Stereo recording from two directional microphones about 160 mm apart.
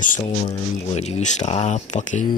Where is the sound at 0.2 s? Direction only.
45° left (ahead or behind).